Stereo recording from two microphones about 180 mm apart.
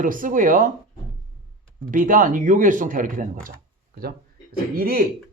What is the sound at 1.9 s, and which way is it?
Speech, 50° right (ahead or behind).